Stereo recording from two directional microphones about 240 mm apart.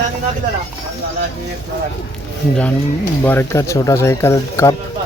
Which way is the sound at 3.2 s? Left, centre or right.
Centre.